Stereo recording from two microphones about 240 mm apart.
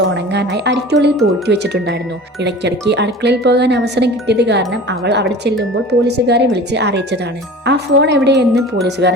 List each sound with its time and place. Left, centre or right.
0.0 s speech: right